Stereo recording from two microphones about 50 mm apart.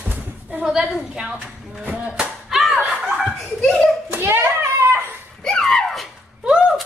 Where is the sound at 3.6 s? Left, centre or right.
Centre.